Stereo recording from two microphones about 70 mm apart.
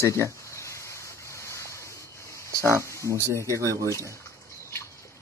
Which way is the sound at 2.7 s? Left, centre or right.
Left.